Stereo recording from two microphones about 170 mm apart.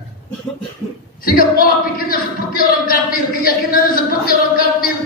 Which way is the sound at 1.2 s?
60° left (ahead or behind).